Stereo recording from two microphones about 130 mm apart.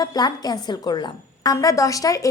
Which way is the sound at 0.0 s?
30° left (ahead or behind).